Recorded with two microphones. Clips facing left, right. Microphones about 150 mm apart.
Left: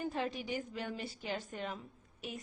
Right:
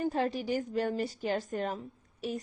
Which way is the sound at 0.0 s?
40° right (ahead or behind).